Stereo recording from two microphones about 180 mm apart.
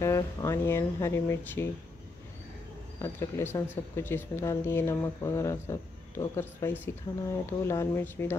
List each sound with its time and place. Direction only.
0.0 s speech: 15° left (ahead or behind)
3.0 s speech: 15° left (ahead or behind)